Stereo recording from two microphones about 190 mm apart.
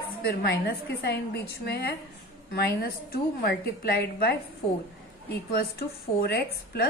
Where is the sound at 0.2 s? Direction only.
55° left (ahead or behind).